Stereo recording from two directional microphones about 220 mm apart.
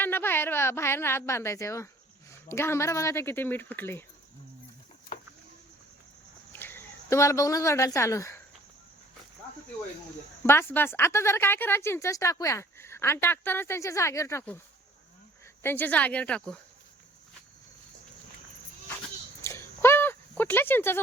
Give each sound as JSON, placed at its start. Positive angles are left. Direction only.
{"t": 0.0, "sound": "a woman's voice", "side_deg": 10}
{"t": 6.5, "sound": "speech", "side_deg": 10}
{"t": 10.4, "sound": "a woman's voice", "side_deg": 10}
{"t": 15.6, "sound": "a woman's voice", "side_deg": 10}
{"t": 19.4, "sound": "a sound", "side_deg": 10}